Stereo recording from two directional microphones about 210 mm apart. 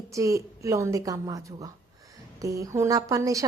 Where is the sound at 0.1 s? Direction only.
15° right (ahead or behind).